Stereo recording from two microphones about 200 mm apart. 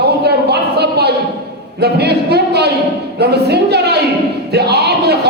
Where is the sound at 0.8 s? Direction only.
55° right (ahead or behind).